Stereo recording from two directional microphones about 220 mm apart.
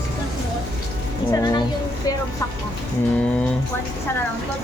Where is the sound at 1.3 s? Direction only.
15° left (ahead or behind).